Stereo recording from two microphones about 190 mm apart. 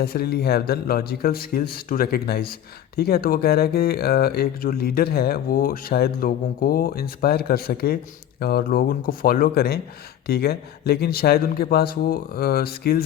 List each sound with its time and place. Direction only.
0.0 s a man's voice: 55° left (ahead or behind)